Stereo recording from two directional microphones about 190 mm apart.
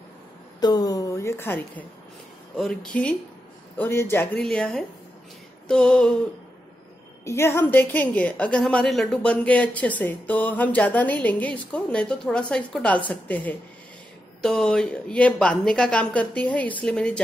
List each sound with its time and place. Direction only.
0.6 s a woman's voice: 20° left (ahead or behind); by 6.1 s 5° left (ahead or behind)
7.2 s a woman's voice: 15° left (ahead or behind)